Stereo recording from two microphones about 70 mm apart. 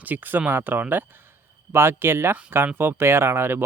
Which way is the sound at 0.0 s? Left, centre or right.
Right.